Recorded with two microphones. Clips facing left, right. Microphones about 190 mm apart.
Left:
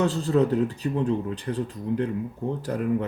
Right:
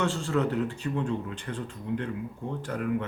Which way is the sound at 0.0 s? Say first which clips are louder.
Left 5 dB; 40° left (ahead or behind).